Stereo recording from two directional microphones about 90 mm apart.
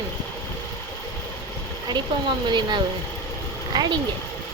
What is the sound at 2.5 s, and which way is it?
Speech, 55° right (ahead or behind).